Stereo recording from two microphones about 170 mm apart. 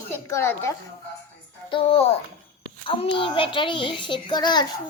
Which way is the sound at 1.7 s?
35° left (ahead or behind).